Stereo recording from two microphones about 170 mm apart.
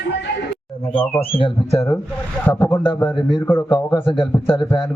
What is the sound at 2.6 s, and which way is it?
A man's voice, 10° left (ahead or behind).